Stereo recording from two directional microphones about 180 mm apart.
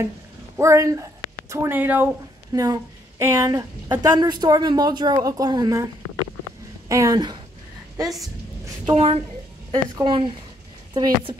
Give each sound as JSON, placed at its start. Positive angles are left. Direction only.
{"t": 0.6, "sound": "a woman's voice", "side_deg": -15}
{"t": 6.9, "sound": "a woman's voice", "side_deg": -20}
{"t": 8.8, "sound": "a woman's voice", "side_deg": -30}